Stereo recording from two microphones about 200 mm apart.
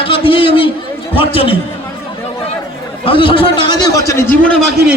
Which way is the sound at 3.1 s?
25° left (ahead or behind).